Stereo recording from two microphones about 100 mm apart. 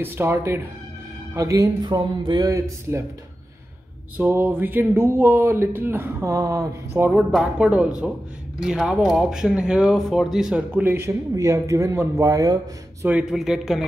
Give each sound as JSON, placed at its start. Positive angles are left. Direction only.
{"t": 0.0, "sound": "speech", "side_deg": -25}
{"t": 1.8, "sound": "speech", "side_deg": -45}
{"t": 4.2, "sound": "speech", "side_deg": -20}
{"t": 6.3, "sound": "speech", "side_deg": -35}
{"t": 7.1, "sound": "speech", "side_deg": -5}
{"t": 10.7, "sound": "speech", "side_deg": -20}
{"t": 13.2, "sound": "speech", "side_deg": -5}